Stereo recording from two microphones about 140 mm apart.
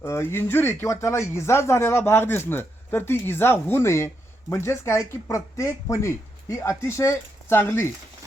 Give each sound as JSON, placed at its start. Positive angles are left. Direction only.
{"t": 0.0, "sound": "speech", "side_deg": 20}